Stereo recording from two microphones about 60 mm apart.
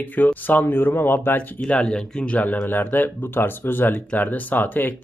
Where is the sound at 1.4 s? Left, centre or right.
Left.